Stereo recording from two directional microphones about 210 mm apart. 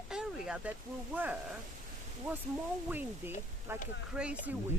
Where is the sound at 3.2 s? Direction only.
10° right (ahead or behind).